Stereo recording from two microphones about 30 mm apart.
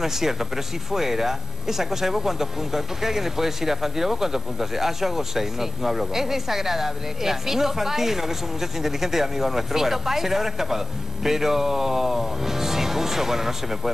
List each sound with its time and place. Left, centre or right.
0.0 s speech: centre